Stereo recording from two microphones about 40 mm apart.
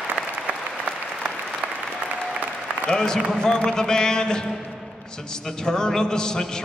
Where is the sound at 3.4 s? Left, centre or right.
Centre.